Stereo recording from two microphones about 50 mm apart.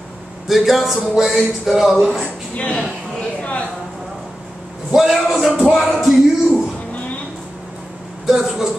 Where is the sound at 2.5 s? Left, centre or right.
Left.